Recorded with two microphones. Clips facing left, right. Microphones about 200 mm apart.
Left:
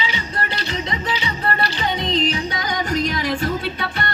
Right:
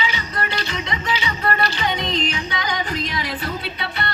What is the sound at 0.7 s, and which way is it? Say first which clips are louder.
Music: left 1 dB; 35° left (ahead or behind).